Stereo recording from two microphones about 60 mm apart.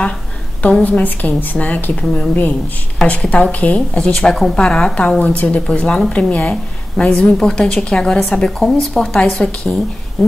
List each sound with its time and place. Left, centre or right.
0.8 s a woman's voice: left
3.9 s a woman's voice: centre